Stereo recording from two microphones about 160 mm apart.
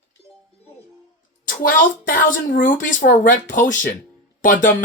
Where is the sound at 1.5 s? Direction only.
60° left (ahead or behind).